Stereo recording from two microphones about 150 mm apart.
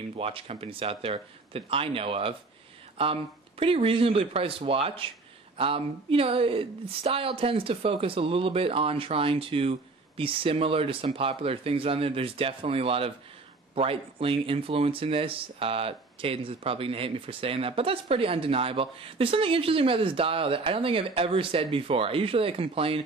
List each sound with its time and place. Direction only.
0.2 s speech: 40° right (ahead or behind)